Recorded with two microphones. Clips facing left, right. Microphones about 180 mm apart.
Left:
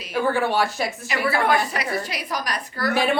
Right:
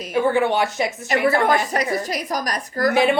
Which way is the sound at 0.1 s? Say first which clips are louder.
Right 3 dB; 20° right (ahead or behind).